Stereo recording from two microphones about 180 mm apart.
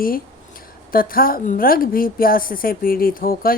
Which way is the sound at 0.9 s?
50° left (ahead or behind).